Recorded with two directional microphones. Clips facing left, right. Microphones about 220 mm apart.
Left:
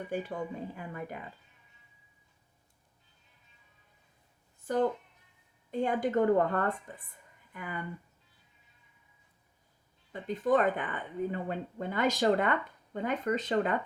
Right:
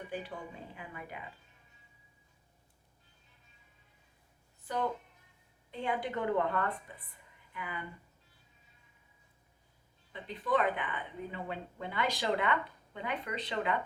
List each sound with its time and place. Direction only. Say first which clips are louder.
0.1 s a woman's voice: left 8 dB; 45° left (ahead or behind)
4.6 s a woman's voice: left 6 dB; 45° left (ahead or behind)
10.1 s a woman's voice: left 5 dB; 45° left (ahead or behind)